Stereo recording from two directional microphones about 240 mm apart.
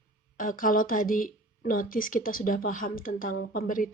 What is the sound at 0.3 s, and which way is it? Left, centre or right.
Speech, left.